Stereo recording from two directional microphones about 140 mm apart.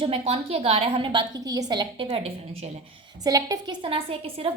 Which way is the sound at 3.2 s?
25° right (ahead or behind).